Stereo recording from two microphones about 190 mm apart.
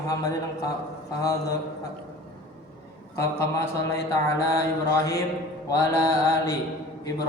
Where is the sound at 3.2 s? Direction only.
15° left (ahead or behind).